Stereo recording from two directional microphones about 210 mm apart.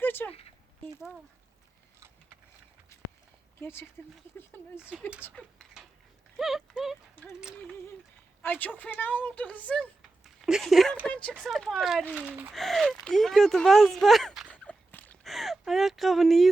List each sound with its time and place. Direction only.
0.0 s a sound: 10° left (ahead or behind)
3.6 s speech: 10° left (ahead or behind)
4.8 s speech: 5° right (ahead or behind)
5.2 s speech: 5° left (ahead or behind)
6.3 s clip-clop: centre (ahead or behind)
8.4 s speech: 10° left (ahead or behind)